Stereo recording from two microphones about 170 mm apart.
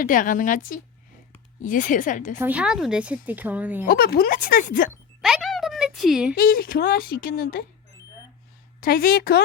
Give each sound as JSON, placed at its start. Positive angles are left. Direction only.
{"t": 0.0, "sound": "a woman's voice", "side_deg": 50}
{"t": 2.4, "sound": "a woman's voice", "side_deg": -10}
{"t": 3.8, "sound": "speech", "side_deg": 60}
{"t": 5.2, "sound": "a sound", "side_deg": 0}
{"t": 6.3, "sound": "speech", "side_deg": 60}
{"t": 8.8, "sound": "speech", "side_deg": 60}